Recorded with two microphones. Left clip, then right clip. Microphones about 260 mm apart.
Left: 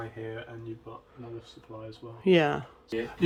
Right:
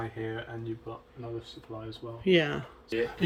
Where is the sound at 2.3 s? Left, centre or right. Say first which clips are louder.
Left 2 dB; centre.